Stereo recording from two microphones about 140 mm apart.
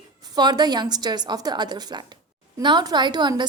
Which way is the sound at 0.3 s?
30° right (ahead or behind).